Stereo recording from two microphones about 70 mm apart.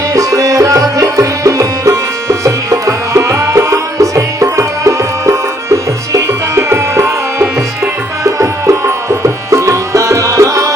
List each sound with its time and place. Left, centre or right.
0.1 s music: right